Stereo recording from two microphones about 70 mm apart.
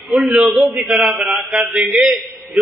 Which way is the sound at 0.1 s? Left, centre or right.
Centre.